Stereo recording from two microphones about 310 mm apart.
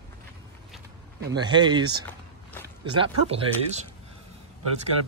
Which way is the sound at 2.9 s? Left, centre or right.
Centre.